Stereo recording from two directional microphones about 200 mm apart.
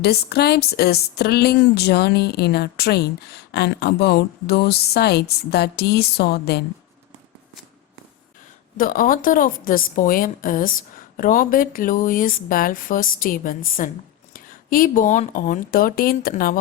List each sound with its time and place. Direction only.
0.0 s a woman's voice: 55° left (ahead or behind)
8.8 s a woman's voice: 45° left (ahead or behind)